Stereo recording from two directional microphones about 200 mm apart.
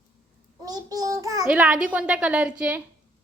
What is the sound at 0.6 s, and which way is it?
Child singing, 20° right (ahead or behind).